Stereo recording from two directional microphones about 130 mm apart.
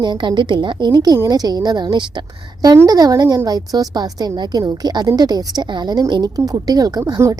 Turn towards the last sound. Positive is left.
turn(degrees=-25)  # may be behind; listen again after turning